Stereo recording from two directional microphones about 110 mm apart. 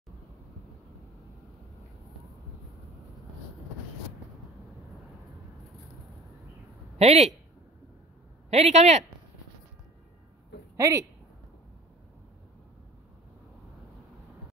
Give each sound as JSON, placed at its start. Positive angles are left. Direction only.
{"t": 7.0, "sound": "speech", "side_deg": -80}
{"t": 8.5, "sound": "speech", "side_deg": -85}
{"t": 10.8, "sound": "speech", "side_deg": -30}